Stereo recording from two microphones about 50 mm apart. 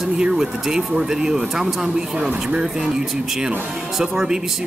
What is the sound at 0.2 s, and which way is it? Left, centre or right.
Speech, centre.